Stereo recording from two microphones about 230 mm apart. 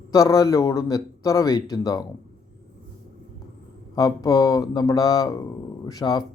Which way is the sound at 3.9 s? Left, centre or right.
Centre.